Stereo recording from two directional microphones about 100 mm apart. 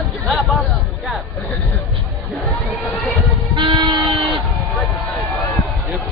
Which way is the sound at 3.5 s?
50° right (ahead or behind).